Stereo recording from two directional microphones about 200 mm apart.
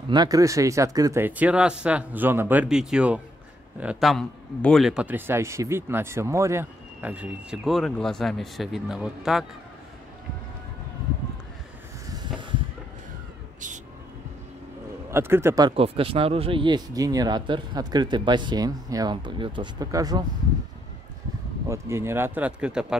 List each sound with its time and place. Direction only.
0.1 s a man's voice: 20° right (ahead or behind); by 9.5 s centre (ahead or behind)
12.1 s a sound: 20° right (ahead or behind)
15.0 s speech: 10° right (ahead or behind)
21.6 s speech: 15° right (ahead or behind)